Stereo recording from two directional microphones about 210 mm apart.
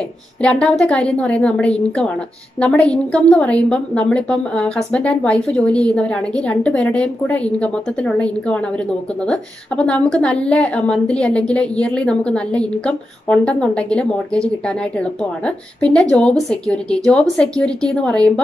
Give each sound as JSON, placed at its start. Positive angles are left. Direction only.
{"t": 0.4, "sound": "a woman's voice", "side_deg": 5}
{"t": 3.1, "sound": "a woman's voice", "side_deg": 5}